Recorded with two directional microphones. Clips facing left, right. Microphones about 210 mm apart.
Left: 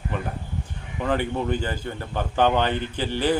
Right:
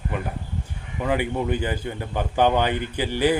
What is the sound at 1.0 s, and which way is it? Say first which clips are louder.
Speech: right 1 dB; 10° right (ahead or behind).